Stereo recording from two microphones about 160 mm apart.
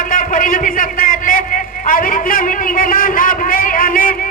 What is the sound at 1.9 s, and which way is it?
A man's voice, 60° left (ahead or behind).